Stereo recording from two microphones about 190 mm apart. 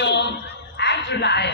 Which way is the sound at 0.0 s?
65° left (ahead or behind).